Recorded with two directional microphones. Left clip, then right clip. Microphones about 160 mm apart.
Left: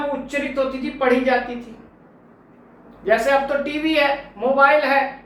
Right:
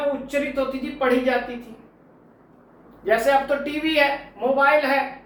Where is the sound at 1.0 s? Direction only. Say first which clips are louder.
Left 3 dB; 20° left (ahead or behind).